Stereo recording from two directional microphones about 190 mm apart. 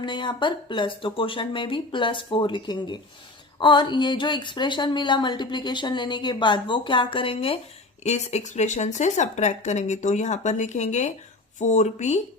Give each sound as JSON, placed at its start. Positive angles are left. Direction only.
{"t": 0.0, "sound": "speech", "side_deg": 25}